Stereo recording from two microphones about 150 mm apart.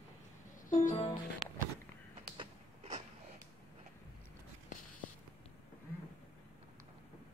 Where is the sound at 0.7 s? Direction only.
60° left (ahead or behind).